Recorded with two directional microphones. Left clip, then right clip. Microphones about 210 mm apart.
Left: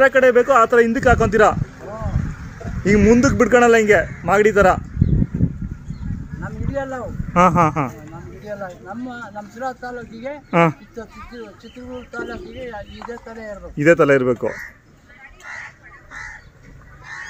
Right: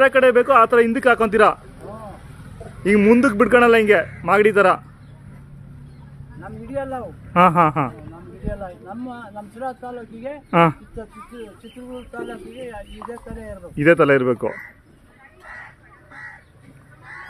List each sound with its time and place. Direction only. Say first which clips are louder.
0.0 s speech: left 1 dB; centre (ahead or behind)
2.8 s speech: even; 5° right (ahead or behind)
6.4 s speech: left 2 dB; 10° right (ahead or behind)
12.1 s speech: left 4 dB; centre (ahead or behind)
13.0 s speech: even; 45° left (ahead or behind)
13.4 s speech: left 1 dB; centre (ahead or behind)